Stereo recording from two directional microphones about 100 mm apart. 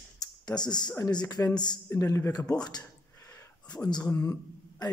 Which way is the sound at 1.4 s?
25° left (ahead or behind).